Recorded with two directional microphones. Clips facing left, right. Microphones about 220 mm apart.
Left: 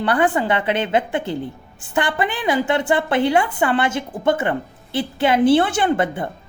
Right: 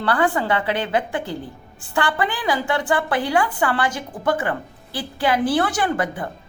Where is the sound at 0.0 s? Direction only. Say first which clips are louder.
Left 2 dB; 20° left (ahead or behind).